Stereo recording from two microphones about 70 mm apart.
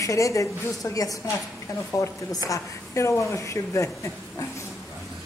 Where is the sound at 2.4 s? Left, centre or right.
Left.